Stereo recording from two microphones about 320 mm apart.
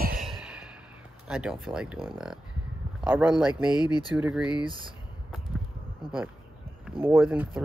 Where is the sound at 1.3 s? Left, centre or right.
Centre.